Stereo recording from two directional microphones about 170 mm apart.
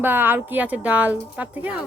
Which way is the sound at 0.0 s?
10° right (ahead or behind).